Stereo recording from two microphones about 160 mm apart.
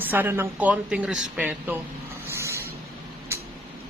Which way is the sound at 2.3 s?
15° right (ahead or behind).